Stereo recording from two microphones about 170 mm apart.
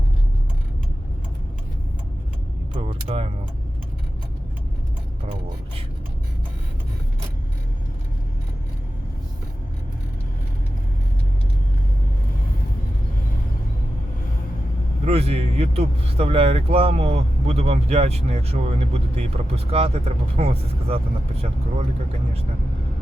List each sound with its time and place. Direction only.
2.7 s music: 35° right (ahead or behind)
15.0 s speech: 35° right (ahead or behind)